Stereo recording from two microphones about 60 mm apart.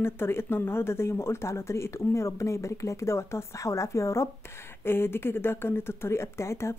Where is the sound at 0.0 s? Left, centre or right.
Left.